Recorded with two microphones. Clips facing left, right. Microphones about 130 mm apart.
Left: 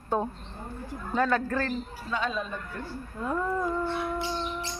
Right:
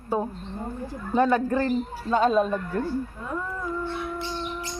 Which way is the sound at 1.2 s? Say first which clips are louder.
Right 5 dB; 20° right (ahead or behind).